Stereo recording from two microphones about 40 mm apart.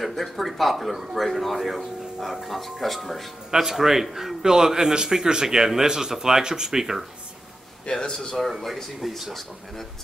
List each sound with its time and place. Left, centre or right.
0.0 s speech: centre
1.8 s speech: centre
3.5 s a man's voice: centre
7.8 s speech: centre
8.4 s speech: centre